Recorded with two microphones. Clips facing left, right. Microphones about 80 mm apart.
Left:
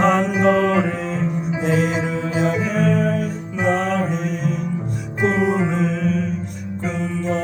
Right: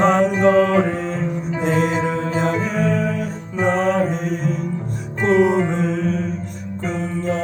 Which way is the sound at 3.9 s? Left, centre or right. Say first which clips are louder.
Right 2 dB; right.